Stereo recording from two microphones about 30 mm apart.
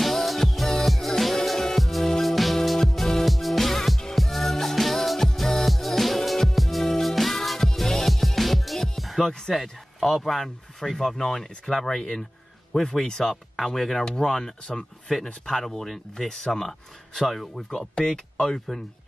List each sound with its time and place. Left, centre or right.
0.0 s music: centre
9.3 s speech: left
9.6 s speech: centre
14.0 s speech: centre
15.1 s speech: centre
16.3 s speech: centre
16.5 s speech: centre
17.6 s speech: left
18.0 s speech: centre